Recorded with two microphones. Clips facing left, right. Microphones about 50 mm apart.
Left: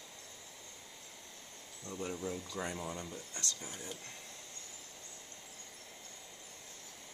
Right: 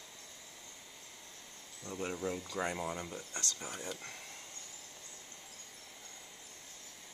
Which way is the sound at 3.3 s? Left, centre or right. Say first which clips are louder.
Right 3 dB; right.